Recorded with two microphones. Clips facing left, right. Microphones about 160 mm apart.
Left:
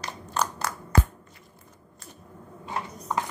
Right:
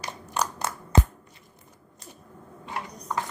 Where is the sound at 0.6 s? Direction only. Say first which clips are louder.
Even; 25° right (ahead or behind).